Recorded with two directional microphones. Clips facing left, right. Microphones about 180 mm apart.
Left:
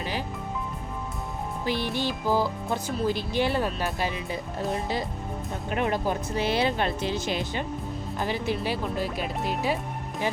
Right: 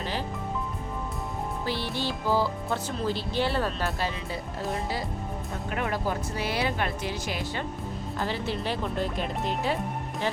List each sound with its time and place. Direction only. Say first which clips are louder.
0.0 s music: even; 15° left (ahead or behind)
1.6 s speech: left 4 dB; 15° left (ahead or behind)